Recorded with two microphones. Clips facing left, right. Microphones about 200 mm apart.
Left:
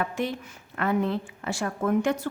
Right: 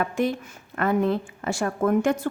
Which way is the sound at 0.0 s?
45° right (ahead or behind).